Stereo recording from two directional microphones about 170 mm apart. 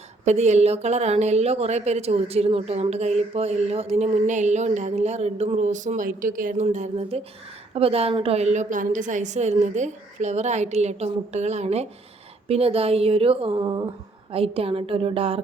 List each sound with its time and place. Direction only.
0.3 s a woman's voice: 40° right (ahead or behind)